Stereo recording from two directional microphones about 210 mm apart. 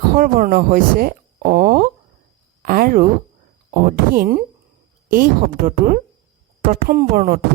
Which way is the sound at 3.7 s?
45° right (ahead or behind).